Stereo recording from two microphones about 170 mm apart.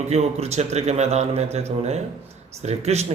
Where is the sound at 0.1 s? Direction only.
40° right (ahead or behind).